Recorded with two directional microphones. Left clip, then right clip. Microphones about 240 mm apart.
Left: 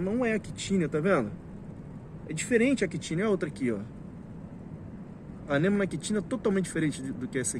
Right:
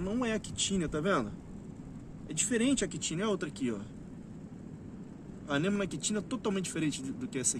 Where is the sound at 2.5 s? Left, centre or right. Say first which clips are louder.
Left 6 dB; right.